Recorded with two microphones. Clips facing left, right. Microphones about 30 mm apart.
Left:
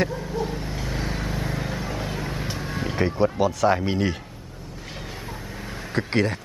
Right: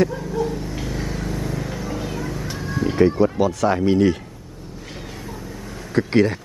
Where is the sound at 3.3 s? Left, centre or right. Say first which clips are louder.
Right 1 dB; centre.